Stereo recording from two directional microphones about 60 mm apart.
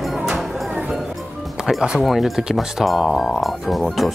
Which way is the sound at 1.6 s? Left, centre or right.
Centre.